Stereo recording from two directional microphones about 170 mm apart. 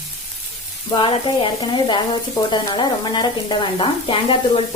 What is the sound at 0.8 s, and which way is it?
Speech, 30° left (ahead or behind).